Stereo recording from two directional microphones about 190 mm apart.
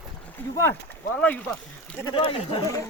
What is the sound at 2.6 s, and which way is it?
Speech, 15° left (ahead or behind).